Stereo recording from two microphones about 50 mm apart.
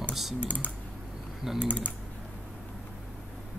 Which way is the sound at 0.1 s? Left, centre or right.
Centre.